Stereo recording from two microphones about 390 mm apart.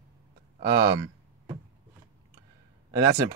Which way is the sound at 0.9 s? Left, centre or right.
Centre.